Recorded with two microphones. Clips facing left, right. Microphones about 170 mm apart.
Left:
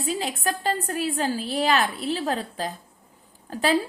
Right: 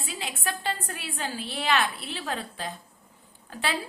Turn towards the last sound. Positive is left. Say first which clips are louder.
# left 8 dB
turn(degrees=40)  # may be behind; listen again after turning